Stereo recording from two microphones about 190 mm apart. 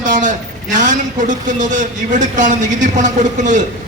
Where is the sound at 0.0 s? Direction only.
40° right (ahead or behind).